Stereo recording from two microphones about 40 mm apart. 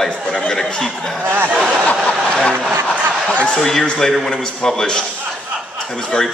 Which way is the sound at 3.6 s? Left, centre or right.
Centre.